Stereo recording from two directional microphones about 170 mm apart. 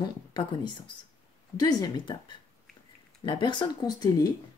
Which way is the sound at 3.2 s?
25° left (ahead or behind).